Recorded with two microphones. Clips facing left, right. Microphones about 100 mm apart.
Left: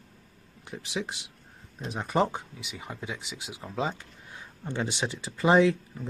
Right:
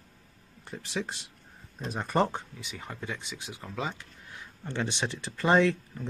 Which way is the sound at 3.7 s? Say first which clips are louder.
Left 4 dB; 25° left (ahead or behind).